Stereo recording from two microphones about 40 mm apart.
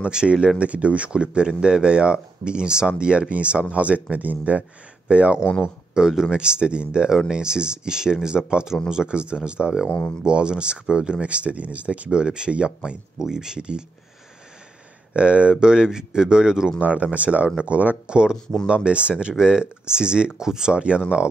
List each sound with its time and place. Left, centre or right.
0.0 s speech: centre
0.6 s speech: right
5.9 s speech: centre
9.8 s speech: left
10.2 s speech: right
12.1 s speech: right
13.2 s speech: centre
15.1 s speech: right
16.8 s speech: right
18.0 s speech: right
20.7 s speech: right